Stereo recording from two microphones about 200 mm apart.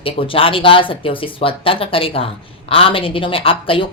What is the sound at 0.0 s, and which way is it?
Speech, 25° left (ahead or behind).